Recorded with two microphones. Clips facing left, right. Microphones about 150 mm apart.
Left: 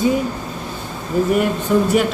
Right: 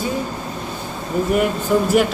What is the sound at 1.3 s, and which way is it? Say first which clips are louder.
Speech: right 1 dB; centre (ahead or behind).